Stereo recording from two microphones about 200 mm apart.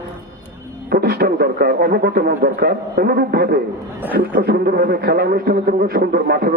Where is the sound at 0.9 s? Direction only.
50° right (ahead or behind).